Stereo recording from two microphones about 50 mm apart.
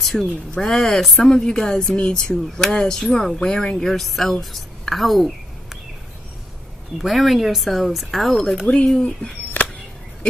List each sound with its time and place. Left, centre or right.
0.0 s speech: centre
3.8 s speech: centre
7.0 s speech: centre
8.6 s speech: centre
9.6 s a sound: left